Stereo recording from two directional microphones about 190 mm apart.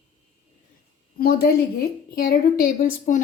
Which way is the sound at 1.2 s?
55° left (ahead or behind).